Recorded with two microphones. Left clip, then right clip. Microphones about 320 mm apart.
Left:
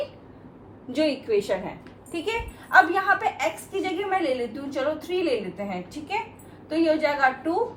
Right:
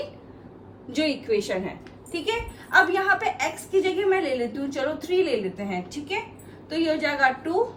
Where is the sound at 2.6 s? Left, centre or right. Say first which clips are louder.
Left 1 dB; centre.